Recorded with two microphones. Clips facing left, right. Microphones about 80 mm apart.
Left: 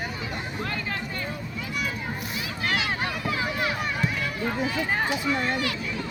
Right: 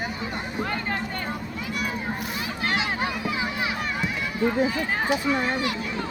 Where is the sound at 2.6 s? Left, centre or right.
Right.